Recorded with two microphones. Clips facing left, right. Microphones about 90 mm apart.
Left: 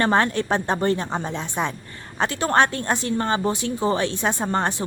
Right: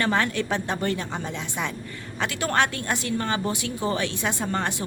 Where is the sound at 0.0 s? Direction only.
35° left (ahead or behind).